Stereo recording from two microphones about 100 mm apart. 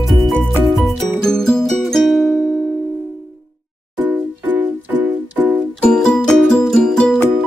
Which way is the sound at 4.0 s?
15° right (ahead or behind).